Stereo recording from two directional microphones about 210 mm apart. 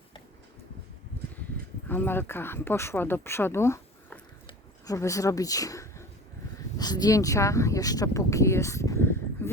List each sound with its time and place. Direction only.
1.9 s speech: 10° left (ahead or behind)
4.4 s a sound: 15° left (ahead or behind)
6.7 s speech: 20° left (ahead or behind)